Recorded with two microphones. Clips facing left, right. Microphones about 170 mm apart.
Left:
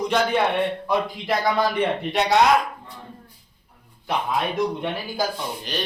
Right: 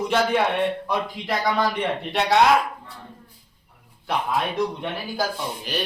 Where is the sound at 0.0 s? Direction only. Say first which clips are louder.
Even; 5° right (ahead or behind).